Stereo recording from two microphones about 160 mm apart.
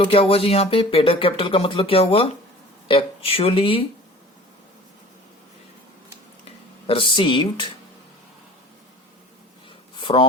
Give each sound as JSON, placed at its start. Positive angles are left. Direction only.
{"t": 0.0, "sound": "speech", "side_deg": 35}
{"t": 6.4, "sound": "speech", "side_deg": 35}
{"t": 9.9, "sound": "a sound", "side_deg": 30}